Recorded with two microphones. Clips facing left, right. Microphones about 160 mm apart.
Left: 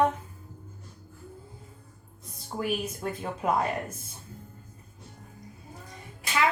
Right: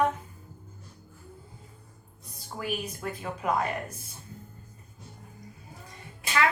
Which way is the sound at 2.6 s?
25° left (ahead or behind).